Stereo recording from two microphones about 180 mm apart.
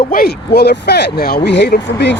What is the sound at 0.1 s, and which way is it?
Speech, 60° left (ahead or behind).